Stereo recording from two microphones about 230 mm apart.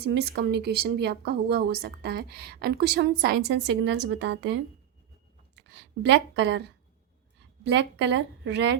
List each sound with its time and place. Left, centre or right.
0.0 s a woman's voice: right